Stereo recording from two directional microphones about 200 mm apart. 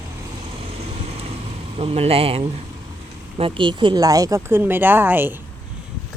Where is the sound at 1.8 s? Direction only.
30° right (ahead or behind); by 5.3 s 10° right (ahead or behind).